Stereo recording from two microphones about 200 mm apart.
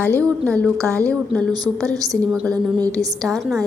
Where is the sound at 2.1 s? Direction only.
Centre (ahead or behind).